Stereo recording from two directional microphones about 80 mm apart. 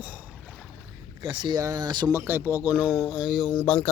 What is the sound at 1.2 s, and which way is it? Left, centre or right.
Speech, right.